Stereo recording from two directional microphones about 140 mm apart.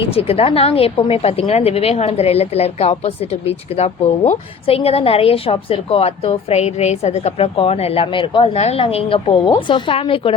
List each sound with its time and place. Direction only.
0.2 s a woman's voice: 45° left (ahead or behind)